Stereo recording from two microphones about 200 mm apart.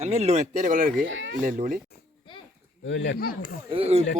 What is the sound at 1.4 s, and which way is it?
Speech, 40° right (ahead or behind).